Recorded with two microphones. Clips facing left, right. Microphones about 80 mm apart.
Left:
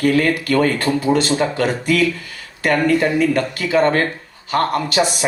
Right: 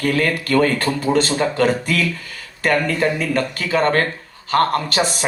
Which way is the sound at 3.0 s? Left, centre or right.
Right.